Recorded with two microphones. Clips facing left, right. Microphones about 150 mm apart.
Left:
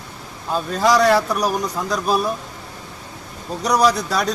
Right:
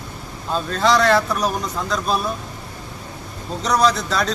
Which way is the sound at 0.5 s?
10° left (ahead or behind).